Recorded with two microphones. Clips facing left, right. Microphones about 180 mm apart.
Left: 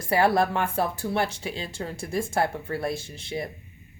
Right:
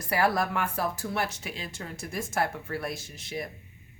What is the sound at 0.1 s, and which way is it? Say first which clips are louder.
Speech: left 5 dB; 25° left (ahead or behind).